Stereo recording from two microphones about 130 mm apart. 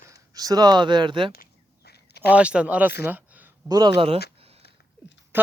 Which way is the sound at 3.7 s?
35° right (ahead or behind).